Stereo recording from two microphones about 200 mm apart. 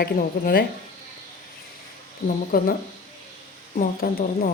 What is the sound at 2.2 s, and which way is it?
Speech, 45° left (ahead or behind).